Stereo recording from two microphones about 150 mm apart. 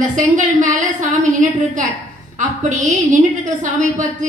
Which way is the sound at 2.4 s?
60° right (ahead or behind).